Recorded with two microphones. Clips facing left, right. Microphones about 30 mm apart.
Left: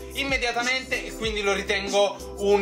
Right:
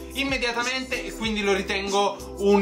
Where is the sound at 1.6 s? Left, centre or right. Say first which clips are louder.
Left 1 dB; right.